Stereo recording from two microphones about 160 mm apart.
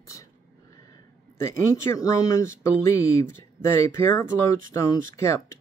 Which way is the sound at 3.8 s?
15° left (ahead or behind).